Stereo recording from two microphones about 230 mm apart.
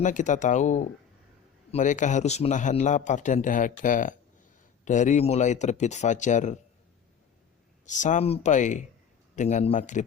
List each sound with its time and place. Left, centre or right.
0.0 s a man's voice: left
7.9 s a man's voice: left